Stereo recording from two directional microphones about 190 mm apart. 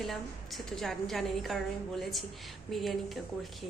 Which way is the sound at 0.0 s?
Centre (ahead or behind).